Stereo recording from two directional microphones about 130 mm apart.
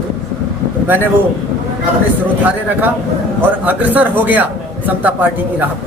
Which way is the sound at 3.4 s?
15° right (ahead or behind).